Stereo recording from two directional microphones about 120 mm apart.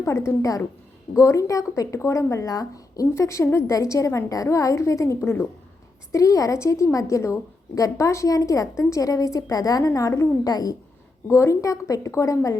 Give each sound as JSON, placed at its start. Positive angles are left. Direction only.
{"t": 0.0, "sound": "speech", "side_deg": 25}